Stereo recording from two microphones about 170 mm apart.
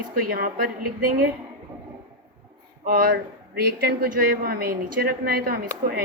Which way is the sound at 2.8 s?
60° right (ahead or behind).